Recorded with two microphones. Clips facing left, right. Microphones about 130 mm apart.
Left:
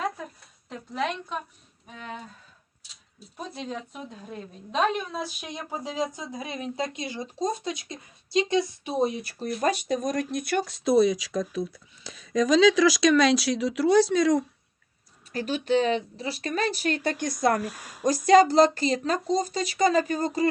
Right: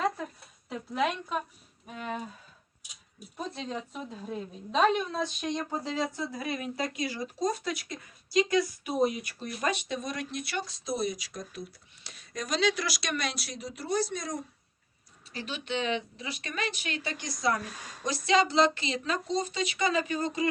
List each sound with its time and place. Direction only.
0.7 s a woman's voice: 5° right (ahead or behind)
3.3 s a woman's voice: centre (ahead or behind); by 11.3 s 90° left
12.9 s speech: 90° left
15.3 s speech: 45° left (ahead or behind)
17.6 s speech: 5° left (ahead or behind)
18.3 s speech: 45° left (ahead or behind)